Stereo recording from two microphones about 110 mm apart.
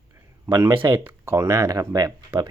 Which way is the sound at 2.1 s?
20° right (ahead or behind).